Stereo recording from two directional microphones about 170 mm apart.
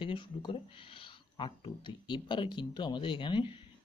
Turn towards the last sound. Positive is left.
turn(degrees=30)  # may be behind; listen again after turning